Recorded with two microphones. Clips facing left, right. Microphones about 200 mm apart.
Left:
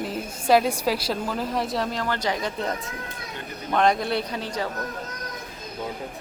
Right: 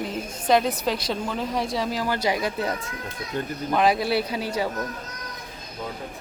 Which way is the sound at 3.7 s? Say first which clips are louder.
Even; 5° right (ahead or behind).